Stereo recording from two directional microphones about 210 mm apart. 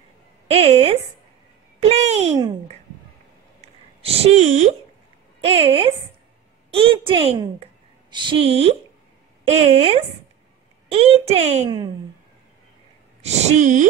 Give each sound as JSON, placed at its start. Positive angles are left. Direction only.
{"t": 0.5, "sound": "a woman's voice", "side_deg": -30}
{"t": 1.8, "sound": "a sound", "side_deg": -30}
{"t": 5.4, "sound": "a woman's voice", "side_deg": -25}
{"t": 13.2, "sound": "speech", "side_deg": -30}